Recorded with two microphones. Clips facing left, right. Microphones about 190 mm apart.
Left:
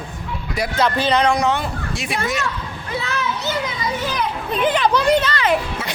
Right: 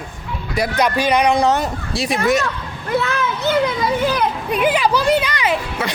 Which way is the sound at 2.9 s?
55° right (ahead or behind).